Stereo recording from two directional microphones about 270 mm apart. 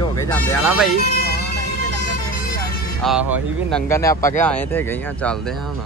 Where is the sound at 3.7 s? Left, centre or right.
Centre.